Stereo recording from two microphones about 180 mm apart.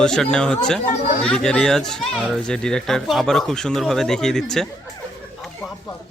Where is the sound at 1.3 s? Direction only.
5° left (ahead or behind).